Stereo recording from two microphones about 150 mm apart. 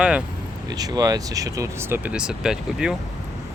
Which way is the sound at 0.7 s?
25° right (ahead or behind).